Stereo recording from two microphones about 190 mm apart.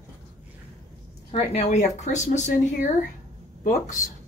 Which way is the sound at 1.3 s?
35° left (ahead or behind).